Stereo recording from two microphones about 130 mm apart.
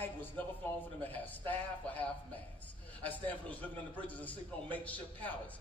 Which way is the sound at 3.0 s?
10° left (ahead or behind).